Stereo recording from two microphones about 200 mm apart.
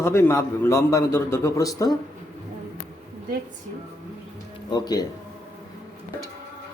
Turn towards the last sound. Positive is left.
turn(degrees=20)  # may be behind; listen again after turning